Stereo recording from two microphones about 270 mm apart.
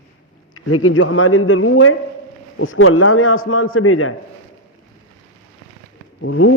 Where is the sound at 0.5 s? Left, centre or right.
Left.